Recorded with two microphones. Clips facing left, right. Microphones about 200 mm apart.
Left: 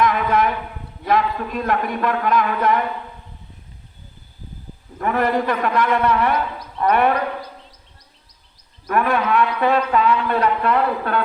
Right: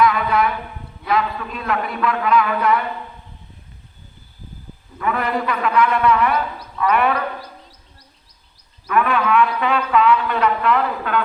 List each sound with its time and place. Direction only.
0.1 s a sound: 45° left (ahead or behind)
1.0 s a man's voice: 45° left (ahead or behind)
4.9 s a man's voice: 45° left (ahead or behind)
8.9 s a man's voice: 40° left (ahead or behind)